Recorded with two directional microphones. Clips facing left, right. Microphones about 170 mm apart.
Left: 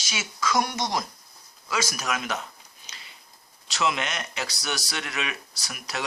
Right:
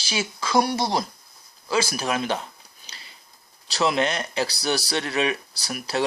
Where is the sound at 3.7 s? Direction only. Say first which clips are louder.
Right 5 dB; 35° right (ahead or behind).